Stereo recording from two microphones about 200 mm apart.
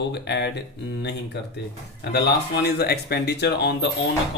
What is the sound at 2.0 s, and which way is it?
Speech, 55° left (ahead or behind).